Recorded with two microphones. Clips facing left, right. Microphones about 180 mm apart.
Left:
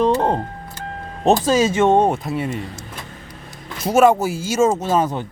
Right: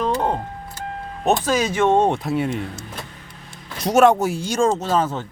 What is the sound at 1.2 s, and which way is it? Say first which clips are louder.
Speech: left 4 dB; 25° left (ahead or behind).